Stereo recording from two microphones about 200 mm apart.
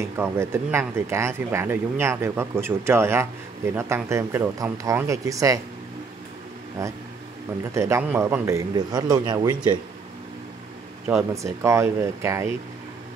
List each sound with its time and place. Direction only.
0.0 s speech: 15° right (ahead or behind)
6.8 s speech: 15° right (ahead or behind)
11.1 s speech: 15° right (ahead or behind)